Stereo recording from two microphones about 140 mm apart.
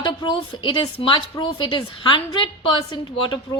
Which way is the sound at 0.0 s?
30° left (ahead or behind).